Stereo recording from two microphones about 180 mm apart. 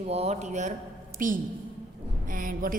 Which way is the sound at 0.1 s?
35° right (ahead or behind).